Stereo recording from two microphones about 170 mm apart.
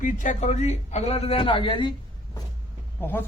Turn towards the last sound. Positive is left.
turn(degrees=10)  # may be behind; listen again after turning